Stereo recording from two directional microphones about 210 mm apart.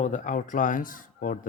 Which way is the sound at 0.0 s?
35° left (ahead or behind).